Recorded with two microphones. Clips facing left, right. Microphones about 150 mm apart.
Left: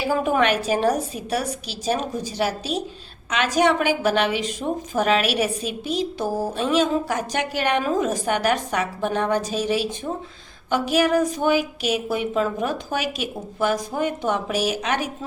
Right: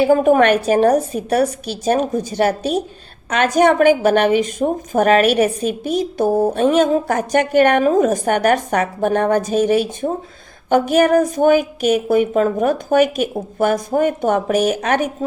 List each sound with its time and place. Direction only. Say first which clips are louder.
0.0 s a woman's voice: right 8 dB; 55° right (ahead or behind)